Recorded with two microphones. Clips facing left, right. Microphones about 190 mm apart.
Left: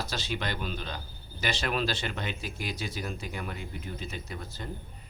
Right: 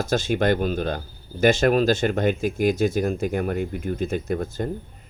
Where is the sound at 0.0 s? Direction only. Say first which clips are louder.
Right 13 dB; 50° right (ahead or behind).